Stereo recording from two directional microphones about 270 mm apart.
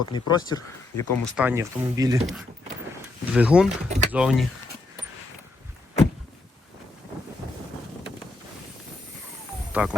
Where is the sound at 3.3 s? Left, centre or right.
Centre.